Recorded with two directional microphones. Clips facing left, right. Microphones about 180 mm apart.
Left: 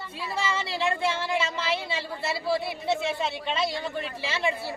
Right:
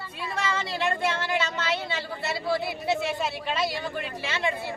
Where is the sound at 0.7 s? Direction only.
Centre (ahead or behind).